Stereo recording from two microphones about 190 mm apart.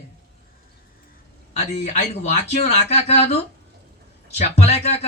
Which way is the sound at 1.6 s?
35° left (ahead or behind).